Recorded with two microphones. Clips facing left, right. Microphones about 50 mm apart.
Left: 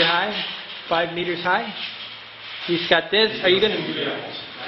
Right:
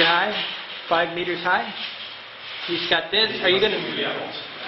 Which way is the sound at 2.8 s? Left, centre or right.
Centre.